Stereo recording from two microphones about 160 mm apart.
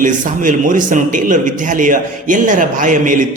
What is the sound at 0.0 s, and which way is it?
A man's voice, 55° right (ahead or behind).